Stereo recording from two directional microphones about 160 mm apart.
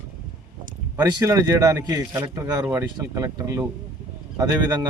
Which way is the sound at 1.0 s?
25° right (ahead or behind).